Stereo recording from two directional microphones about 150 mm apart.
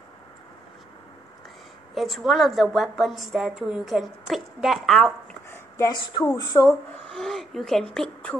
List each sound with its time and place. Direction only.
2.0 s a woman's voice: centre (ahead or behind)
5.5 s a sound: 25° left (ahead or behind)
6.4 s speech: 25° left (ahead or behind)
7.1 s speech: centre (ahead or behind)